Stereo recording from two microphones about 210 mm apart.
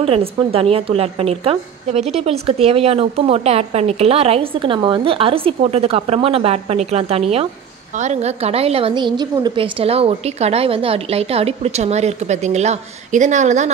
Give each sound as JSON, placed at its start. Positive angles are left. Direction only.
{"t": 0.0, "sound": "a woman's voice", "side_deg": -25}